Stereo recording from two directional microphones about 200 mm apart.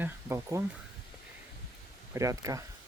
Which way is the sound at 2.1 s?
15° right (ahead or behind).